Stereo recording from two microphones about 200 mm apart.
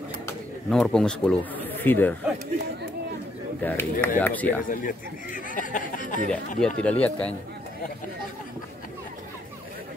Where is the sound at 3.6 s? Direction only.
10° left (ahead or behind).